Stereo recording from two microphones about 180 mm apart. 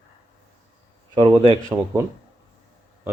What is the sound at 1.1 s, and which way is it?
Speech, 30° right (ahead or behind).